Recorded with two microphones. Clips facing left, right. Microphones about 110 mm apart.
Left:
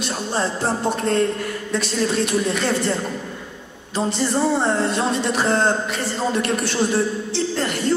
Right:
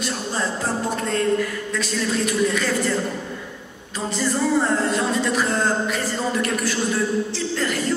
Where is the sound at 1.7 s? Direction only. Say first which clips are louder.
Left 2 dB; 30° left (ahead or behind).